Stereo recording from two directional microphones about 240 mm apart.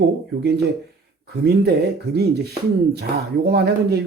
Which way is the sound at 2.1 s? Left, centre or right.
Right.